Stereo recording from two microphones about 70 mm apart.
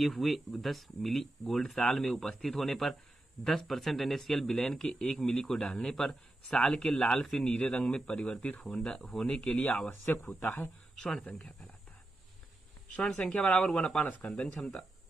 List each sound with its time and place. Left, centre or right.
0.0 s a man's voice: centre; by 10.1 s left
11.0 s a man's voice: centre
13.0 s a man's voice: centre
14.6 s speech: centre